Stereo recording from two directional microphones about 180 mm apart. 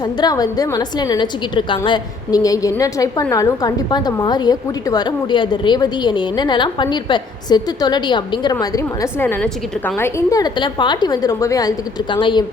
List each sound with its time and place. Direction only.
0.0 s a woman's voice: 20° left (ahead or behind)